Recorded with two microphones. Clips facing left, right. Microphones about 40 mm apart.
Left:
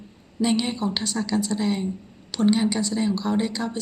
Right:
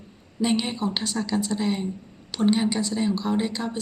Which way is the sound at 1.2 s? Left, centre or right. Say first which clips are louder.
Left 1 dB; centre.